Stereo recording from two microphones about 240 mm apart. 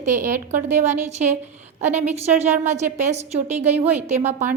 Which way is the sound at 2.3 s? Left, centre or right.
Right.